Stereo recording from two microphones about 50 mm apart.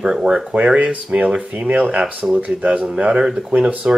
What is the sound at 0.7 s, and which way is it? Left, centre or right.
Speech, right.